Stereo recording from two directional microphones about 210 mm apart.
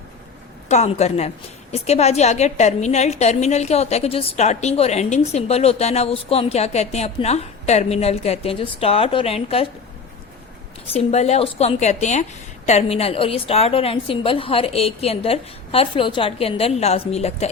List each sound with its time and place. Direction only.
0.7 s a woman's voice: 30° left (ahead or behind)
11.1 s a woman's voice: 30° left (ahead or behind)